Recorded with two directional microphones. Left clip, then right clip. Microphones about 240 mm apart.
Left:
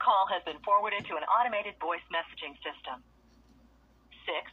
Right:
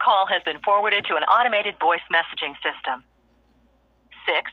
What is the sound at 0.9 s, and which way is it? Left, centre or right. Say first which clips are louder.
Speech: right 10 dB; right.